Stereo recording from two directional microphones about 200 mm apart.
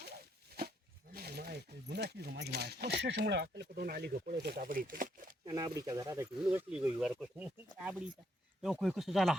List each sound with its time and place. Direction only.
1.1 s speech: 50° right (ahead or behind)
5.5 s speech: 20° right (ahead or behind); by 9.4 s centre (ahead or behind)